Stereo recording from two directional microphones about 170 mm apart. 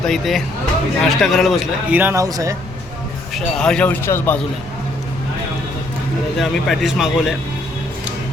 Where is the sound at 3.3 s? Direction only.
5° left (ahead or behind).